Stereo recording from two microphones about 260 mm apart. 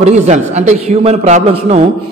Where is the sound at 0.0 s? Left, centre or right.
Right.